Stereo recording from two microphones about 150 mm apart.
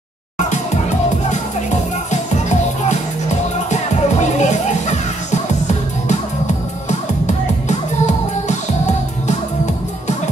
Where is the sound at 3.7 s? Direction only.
50° left (ahead or behind).